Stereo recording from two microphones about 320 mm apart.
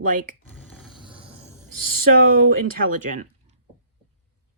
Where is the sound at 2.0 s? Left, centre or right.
Right.